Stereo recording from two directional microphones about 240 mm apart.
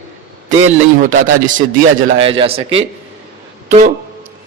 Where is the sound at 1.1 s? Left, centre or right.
Right.